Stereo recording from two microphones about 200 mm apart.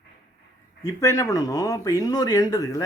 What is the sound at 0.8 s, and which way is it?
Speech, 15° left (ahead or behind).